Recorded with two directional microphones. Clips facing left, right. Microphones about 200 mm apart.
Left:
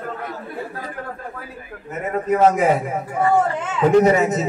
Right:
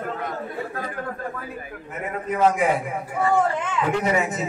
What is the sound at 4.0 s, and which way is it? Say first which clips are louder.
Speech: left 7 dB; 40° left (ahead or behind).